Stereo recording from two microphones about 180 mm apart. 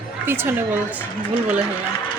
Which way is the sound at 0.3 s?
10° right (ahead or behind).